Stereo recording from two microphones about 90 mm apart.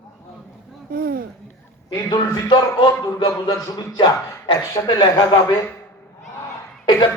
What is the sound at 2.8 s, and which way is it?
Speech, 55° left (ahead or behind).